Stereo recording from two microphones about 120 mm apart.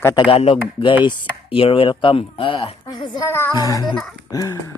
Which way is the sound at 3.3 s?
20° left (ahead or behind).